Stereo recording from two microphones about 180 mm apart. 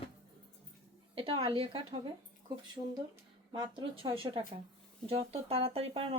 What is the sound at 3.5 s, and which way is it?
A woman's voice, 30° right (ahead or behind).